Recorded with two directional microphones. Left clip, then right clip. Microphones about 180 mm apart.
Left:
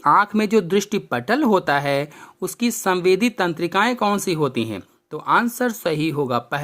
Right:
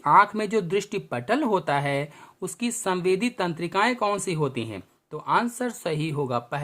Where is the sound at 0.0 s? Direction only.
25° left (ahead or behind).